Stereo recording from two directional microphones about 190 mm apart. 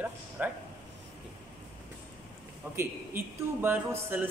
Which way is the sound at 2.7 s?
10° right (ahead or behind).